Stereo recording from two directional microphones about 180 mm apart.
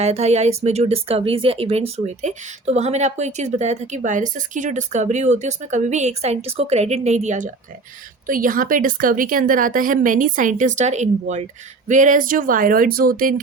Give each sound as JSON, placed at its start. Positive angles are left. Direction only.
{"t": 0.0, "sound": "a woman's voice", "side_deg": -35}